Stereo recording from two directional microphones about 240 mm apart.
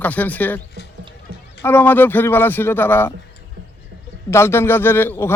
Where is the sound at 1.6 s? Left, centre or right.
Centre.